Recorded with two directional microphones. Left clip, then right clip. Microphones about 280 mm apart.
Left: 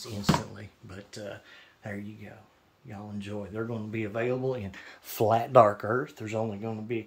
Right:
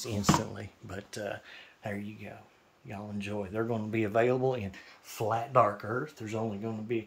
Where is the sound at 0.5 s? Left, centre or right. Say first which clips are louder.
Right 4 dB; centre.